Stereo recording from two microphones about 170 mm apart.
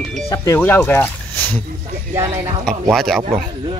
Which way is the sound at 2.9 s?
Centre (ahead or behind).